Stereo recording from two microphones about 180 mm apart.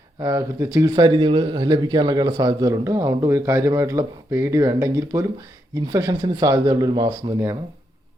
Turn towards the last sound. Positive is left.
turn(degrees=-20)  # may be behind; listen again after turning